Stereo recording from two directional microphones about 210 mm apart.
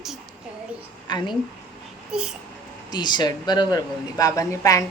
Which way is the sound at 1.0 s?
20° left (ahead or behind).